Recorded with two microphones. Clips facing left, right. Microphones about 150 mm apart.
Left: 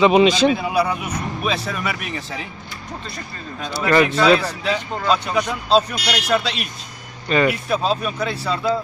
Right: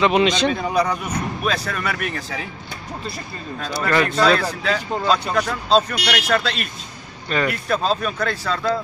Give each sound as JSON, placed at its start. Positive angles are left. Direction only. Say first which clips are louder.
{"t": 0.0, "sound": "speech", "louder": "left 4 dB", "side_deg": 10}
{"t": 3.5, "sound": "speech", "louder": "left 3 dB", "side_deg": 5}